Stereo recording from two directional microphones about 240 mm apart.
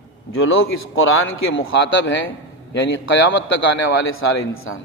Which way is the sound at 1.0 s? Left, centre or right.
Left.